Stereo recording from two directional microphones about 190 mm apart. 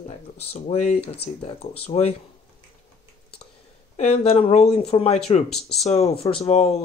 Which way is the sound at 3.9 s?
35° left (ahead or behind).